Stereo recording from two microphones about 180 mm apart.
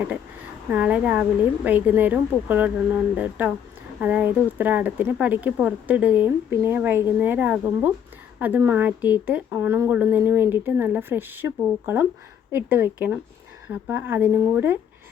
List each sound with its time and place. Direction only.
0.7 s speech: 5° right (ahead or behind)